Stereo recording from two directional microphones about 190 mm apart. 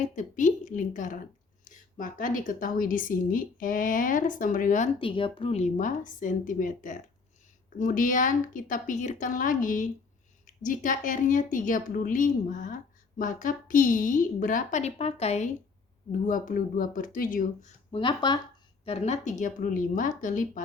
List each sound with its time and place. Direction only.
0.0 s a woman's voice: 40° left (ahead or behind)
4.9 s a woman's voice: 25° left (ahead or behind)
16.2 s a woman's voice: 45° left (ahead or behind)
17.9 s a woman's voice: 25° left (ahead or behind); by 20.6 s 45° left (ahead or behind)